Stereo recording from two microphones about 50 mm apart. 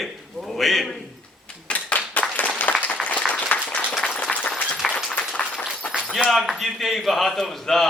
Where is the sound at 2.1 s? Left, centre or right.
Left.